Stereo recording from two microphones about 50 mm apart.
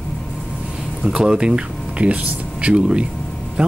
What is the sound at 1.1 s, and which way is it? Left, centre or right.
Speech, centre.